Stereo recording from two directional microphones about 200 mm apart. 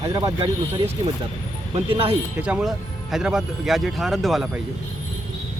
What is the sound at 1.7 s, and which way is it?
Speech, 25° right (ahead or behind).